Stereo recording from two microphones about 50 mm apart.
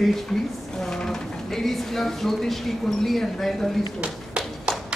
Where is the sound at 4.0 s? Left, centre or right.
Right.